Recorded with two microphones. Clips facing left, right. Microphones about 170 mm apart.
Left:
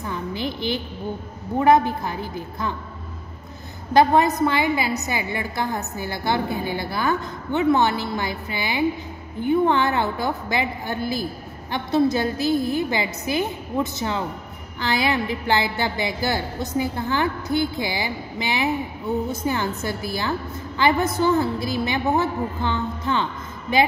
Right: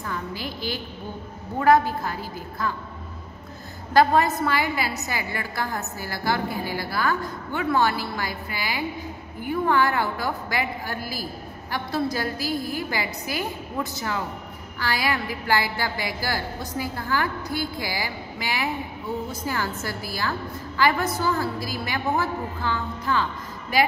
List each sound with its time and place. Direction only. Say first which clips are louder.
0.0 s a sound: left 4 dB; 20° left (ahead or behind)
1.6 s a woman's voice: left 2 dB; 20° left (ahead or behind)
3.9 s a woman's voice: left 2 dB; 20° left (ahead or behind)